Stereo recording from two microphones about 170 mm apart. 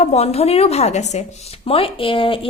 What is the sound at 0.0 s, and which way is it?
A woman's voice, 40° left (ahead or behind).